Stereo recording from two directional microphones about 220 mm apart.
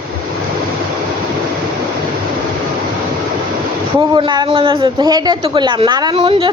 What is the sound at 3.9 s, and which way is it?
Speech, 20° right (ahead or behind).